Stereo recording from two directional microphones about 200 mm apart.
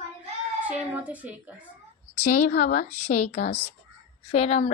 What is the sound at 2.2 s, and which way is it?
A woman's voice, 35° left (ahead or behind).